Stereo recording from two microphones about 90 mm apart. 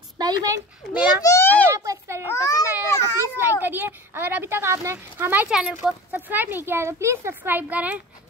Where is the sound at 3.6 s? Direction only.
20° right (ahead or behind).